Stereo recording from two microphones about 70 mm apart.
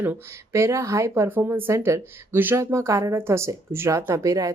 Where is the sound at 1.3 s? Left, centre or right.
Right.